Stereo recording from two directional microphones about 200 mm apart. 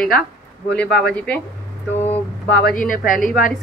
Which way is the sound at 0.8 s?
55° left (ahead or behind).